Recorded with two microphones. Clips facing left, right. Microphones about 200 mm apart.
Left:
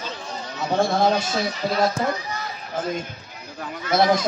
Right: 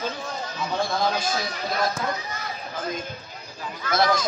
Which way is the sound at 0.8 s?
70° left (ahead or behind).